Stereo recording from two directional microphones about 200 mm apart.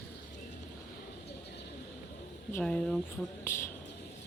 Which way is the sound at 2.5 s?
5° left (ahead or behind).